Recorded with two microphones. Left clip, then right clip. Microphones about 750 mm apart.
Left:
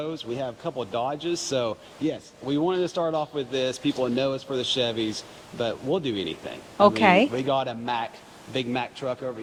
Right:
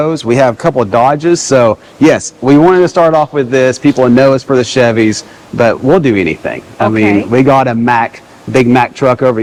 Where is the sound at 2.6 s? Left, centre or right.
Right.